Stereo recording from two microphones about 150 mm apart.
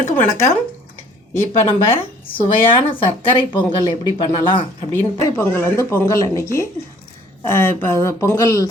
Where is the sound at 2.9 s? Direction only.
35° left (ahead or behind).